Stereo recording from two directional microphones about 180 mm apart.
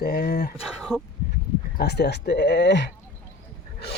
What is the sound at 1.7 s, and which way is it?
Speech, 65° left (ahead or behind).